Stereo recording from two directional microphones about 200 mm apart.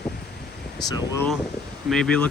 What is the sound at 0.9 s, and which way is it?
Speech, 20° left (ahead or behind).